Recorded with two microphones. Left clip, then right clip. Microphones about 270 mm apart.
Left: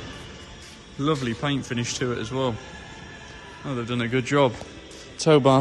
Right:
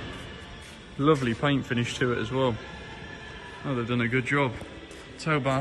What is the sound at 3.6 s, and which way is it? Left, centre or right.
Speech, centre.